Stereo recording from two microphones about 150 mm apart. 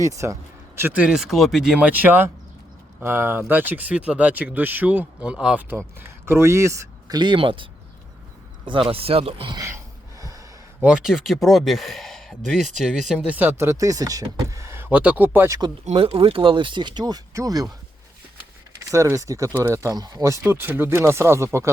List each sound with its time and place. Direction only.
0.0 s speech: 20° right (ahead or behind); by 9.6 s 40° right (ahead or behind)
9.6 s gasp: 20° right (ahead or behind)
10.8 s speech: 5° right (ahead or behind)
15.9 s speech: 40° right (ahead or behind); by 17.7 s 25° right (ahead or behind)
18.8 s speech: 20° right (ahead or behind)